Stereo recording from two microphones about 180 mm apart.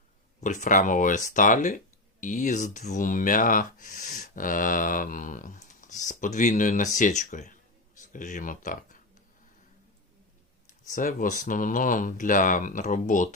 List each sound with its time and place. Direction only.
0.3 s speech: 45° left (ahead or behind)
10.8 s speech: 45° left (ahead or behind)